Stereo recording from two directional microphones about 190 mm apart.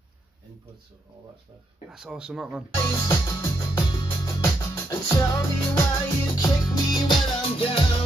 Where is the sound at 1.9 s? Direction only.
Centre (ahead or behind).